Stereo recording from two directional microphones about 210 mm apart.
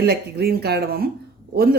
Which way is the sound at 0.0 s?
50° right (ahead or behind).